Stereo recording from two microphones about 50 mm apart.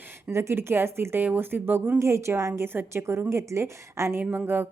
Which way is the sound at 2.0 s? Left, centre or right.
Right.